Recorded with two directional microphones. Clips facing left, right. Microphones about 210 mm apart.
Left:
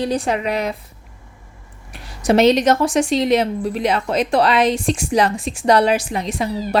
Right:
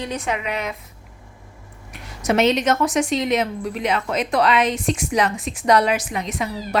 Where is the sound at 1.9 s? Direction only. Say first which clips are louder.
Left 5 dB; 30° left (ahead or behind).